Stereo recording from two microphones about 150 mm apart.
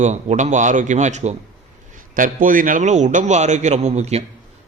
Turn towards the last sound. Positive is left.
turn(degrees=-45)  # may be behind; listen again after turning